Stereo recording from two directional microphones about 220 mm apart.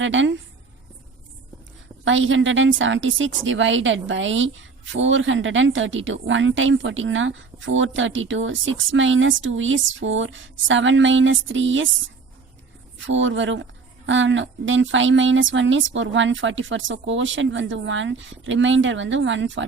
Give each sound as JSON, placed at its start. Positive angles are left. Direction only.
{"t": 0.0, "sound": "a woman's voice", "side_deg": -60}
{"t": 2.0, "sound": "a woman's voice", "side_deg": -60}
{"t": 13.1, "sound": "a woman's voice", "side_deg": -60}